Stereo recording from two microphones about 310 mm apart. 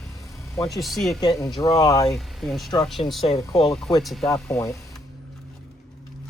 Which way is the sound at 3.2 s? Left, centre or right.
Centre.